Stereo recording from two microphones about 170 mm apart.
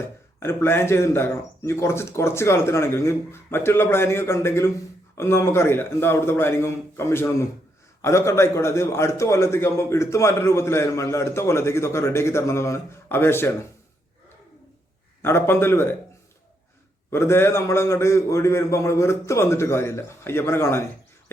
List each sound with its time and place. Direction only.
0.3 s a man's voice: 15° left (ahead or behind)
15.2 s a man's voice: 15° left (ahead or behind)
17.1 s a man's voice: 15° left (ahead or behind)